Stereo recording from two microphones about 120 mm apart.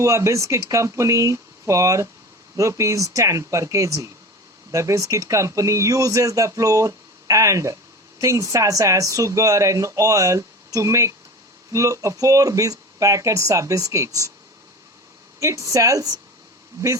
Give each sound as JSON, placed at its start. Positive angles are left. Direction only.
{"t": 0.0, "sound": "speech", "side_deg": -25}
{"t": 15.4, "sound": "speech", "side_deg": -25}